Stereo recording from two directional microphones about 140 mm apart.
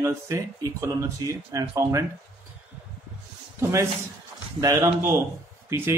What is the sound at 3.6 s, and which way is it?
Speech, 20° right (ahead or behind).